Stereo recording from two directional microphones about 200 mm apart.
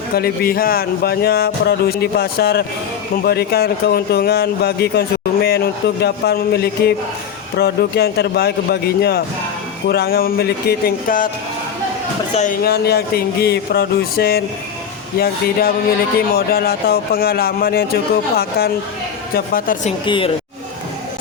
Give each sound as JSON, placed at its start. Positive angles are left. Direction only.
{"t": 0.1, "sound": "speech", "side_deg": 50}
{"t": 12.3, "sound": "speech", "side_deg": 35}
{"t": 12.6, "sound": "speech", "side_deg": 55}
{"t": 16.3, "sound": "speech", "side_deg": 50}
{"t": 20.1, "sound": "speech", "side_deg": 25}